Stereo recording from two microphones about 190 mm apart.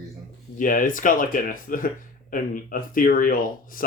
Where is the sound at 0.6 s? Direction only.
45° left (ahead or behind).